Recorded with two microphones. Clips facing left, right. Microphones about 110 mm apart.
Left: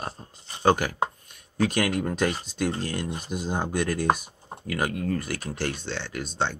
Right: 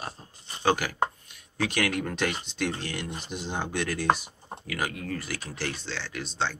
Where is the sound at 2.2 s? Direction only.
40° left (ahead or behind).